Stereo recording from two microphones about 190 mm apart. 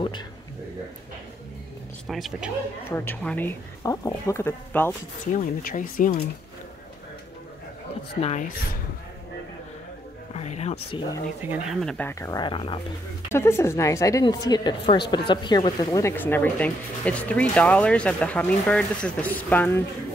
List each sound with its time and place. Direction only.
2.0 s a woman's voice: centre (ahead or behind)
5.2 s speech: 45° left (ahead or behind)
8.2 s speech: 40° left (ahead or behind)
10.3 s speech: 35° left (ahead or behind)
11.4 s speech: 10° right (ahead or behind)
11.8 s a woman's voice: 5° left (ahead or behind); by 12.8 s 25° left (ahead or behind)
13.3 s a woman's voice: 15° left (ahead or behind)